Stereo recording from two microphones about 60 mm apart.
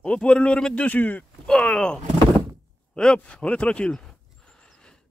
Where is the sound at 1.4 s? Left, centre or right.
Centre.